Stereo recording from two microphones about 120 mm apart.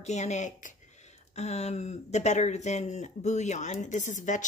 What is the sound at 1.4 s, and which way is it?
Speech, 65° left (ahead or behind).